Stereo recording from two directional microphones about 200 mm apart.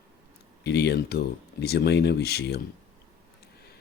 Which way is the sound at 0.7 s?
55° left (ahead or behind).